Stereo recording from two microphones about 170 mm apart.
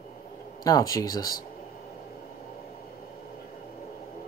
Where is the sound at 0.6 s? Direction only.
20° left (ahead or behind).